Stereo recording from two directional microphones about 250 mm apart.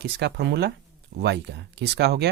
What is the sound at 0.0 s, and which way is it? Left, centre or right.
Speech, right.